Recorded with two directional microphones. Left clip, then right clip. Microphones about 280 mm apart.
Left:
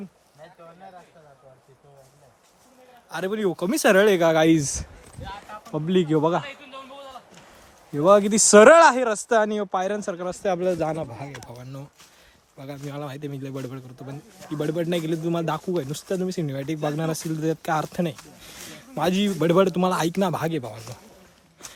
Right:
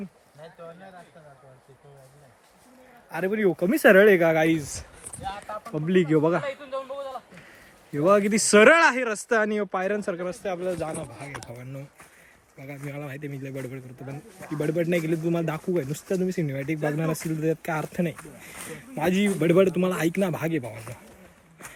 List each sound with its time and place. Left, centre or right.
3.2 s speech: centre
4.4 s speech: left
5.7 s speech: centre
7.9 s speech: centre
10.4 s speech: left
11.5 s speech: centre